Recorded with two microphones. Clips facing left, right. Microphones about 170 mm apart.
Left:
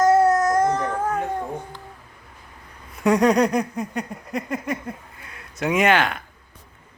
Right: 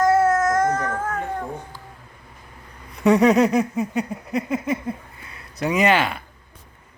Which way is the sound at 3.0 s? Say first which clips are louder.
Right 2 dB; centre (ahead or behind).